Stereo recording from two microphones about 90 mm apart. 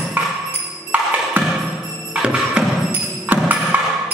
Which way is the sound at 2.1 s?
10° right (ahead or behind).